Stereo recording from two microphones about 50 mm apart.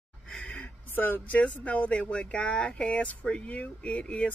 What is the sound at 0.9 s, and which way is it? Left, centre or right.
Speech, left.